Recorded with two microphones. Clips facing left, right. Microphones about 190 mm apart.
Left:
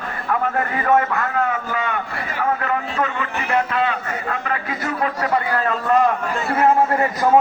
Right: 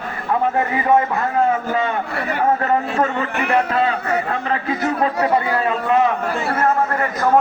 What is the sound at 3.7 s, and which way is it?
Speech, 35° right (ahead or behind).